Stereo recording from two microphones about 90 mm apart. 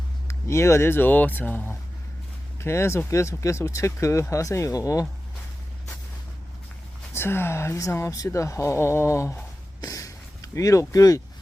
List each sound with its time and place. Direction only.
0.3 s speech: 35° left (ahead or behind)
2.6 s speech: 30° left (ahead or behind)
7.1 s speech: 25° left (ahead or behind)